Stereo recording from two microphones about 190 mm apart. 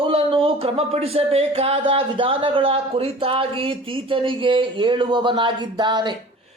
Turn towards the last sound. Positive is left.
turn(degrees=-25)  # may be behind; listen again after turning